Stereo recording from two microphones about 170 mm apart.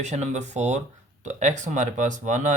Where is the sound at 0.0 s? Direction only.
40° right (ahead or behind).